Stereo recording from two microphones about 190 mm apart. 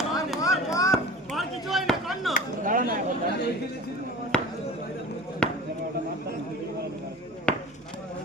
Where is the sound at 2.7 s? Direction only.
45° right (ahead or behind).